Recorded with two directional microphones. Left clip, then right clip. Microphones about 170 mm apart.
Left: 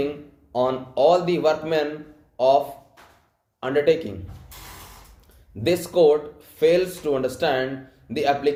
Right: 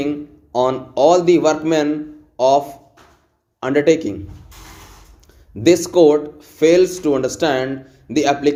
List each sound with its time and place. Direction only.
0.5 s speech: 45° right (ahead or behind)
3.6 s speech: 40° right (ahead or behind)
5.6 s speech: 45° right (ahead or behind)